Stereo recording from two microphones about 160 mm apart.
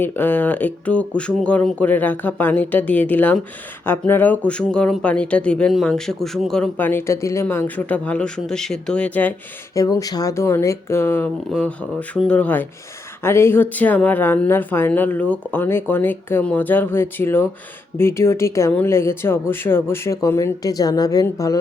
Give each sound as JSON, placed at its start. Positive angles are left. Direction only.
{"t": 0.0, "sound": "speech", "side_deg": 15}
{"t": 9.7, "sound": "speech", "side_deg": 20}